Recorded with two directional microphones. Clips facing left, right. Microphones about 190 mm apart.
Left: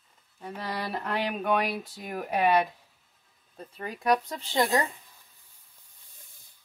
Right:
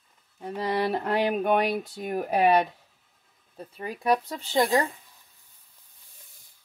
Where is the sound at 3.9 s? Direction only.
5° right (ahead or behind).